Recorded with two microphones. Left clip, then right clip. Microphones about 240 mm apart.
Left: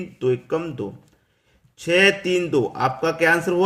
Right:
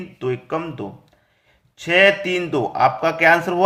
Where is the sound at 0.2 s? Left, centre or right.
Centre.